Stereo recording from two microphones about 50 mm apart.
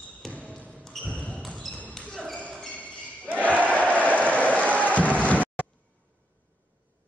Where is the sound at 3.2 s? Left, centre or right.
Right.